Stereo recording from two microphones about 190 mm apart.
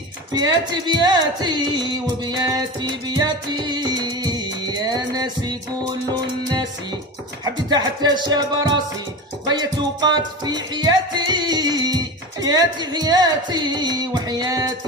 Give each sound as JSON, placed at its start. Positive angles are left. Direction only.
{"t": 0.3, "sound": "speech", "side_deg": -20}
{"t": 7.4, "sound": "speech", "side_deg": -20}
{"t": 9.5, "sound": "music", "side_deg": -20}